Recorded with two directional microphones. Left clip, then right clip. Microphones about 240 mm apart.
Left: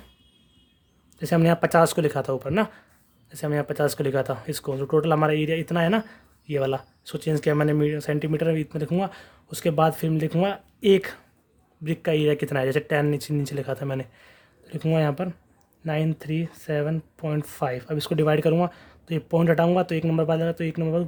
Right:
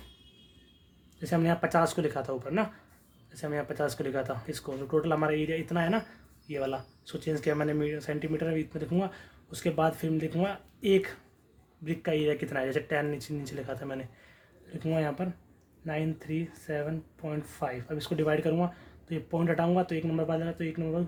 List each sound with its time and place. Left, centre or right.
1.2 s speech: left